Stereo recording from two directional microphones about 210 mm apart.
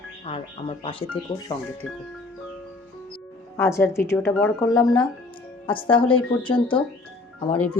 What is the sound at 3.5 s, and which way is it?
A woman's voice, 15° left (ahead or behind).